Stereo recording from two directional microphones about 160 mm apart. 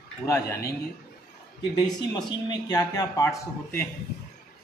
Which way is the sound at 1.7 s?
25° left (ahead or behind).